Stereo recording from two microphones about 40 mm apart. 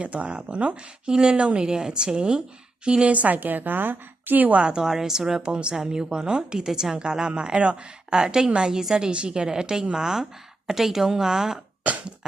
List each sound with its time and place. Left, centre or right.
0.0 s speech: right
3.1 s a woman's voice: right
4.5 s speech: right
5.5 s speech: right
8.1 s speech: centre